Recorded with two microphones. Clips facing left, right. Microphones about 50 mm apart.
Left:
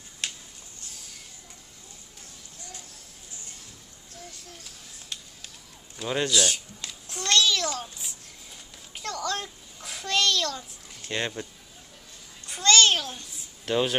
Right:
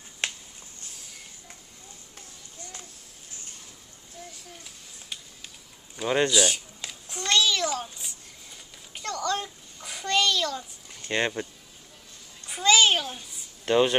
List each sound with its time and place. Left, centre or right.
0.2 s finger snapping: right
4.5 s a sound: centre
5.9 s babbling: centre
12.4 s babbling: centre